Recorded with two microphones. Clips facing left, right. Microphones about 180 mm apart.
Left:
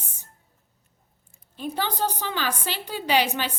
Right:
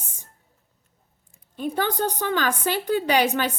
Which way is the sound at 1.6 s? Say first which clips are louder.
Right 3 dB; 50° right (ahead or behind).